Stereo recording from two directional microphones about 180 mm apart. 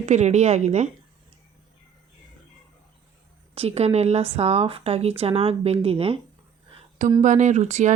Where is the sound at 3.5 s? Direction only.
35° right (ahead or behind).